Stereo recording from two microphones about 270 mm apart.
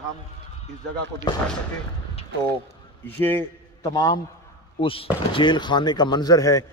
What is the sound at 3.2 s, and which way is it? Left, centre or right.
A man's voice, centre.